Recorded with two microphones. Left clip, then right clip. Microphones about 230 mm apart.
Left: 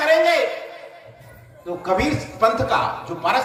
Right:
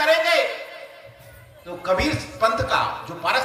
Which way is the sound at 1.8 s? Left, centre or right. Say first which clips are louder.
Left 1 dB; right.